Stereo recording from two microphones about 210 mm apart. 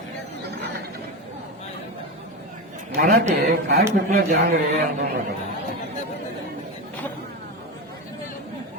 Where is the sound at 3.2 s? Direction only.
35° right (ahead or behind).